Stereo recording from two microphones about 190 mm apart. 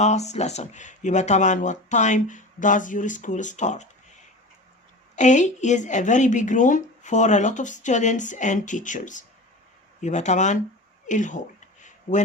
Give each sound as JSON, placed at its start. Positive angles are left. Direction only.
{"t": 0.0, "sound": "speech", "side_deg": 35}
{"t": 5.1, "sound": "speech", "side_deg": 40}
{"t": 11.0, "sound": "a sound", "side_deg": 40}